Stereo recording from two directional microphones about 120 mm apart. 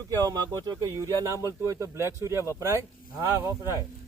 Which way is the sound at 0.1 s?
30° right (ahead or behind).